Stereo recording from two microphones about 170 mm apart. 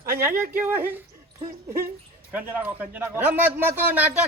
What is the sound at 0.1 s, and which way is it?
Speech, 15° right (ahead or behind).